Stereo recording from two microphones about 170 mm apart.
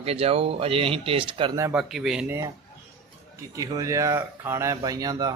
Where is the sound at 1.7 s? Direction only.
Centre (ahead or behind).